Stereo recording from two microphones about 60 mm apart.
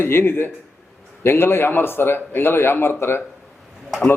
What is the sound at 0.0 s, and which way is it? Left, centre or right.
A man's voice, left.